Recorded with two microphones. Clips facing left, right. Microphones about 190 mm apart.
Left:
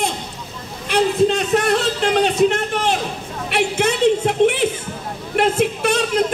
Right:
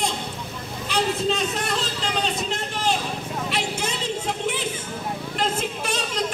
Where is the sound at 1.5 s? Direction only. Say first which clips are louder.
Left 10 dB; 65° left (ahead or behind).